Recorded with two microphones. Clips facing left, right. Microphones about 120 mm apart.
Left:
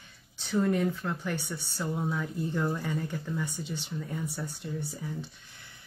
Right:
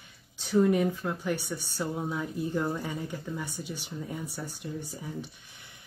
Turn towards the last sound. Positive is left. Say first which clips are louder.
# left 1 dB
turn(degrees=-15)  # may be behind; listen again after turning